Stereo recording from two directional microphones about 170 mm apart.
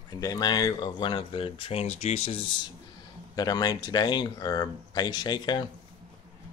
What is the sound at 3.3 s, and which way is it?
Speech, 25° left (ahead or behind).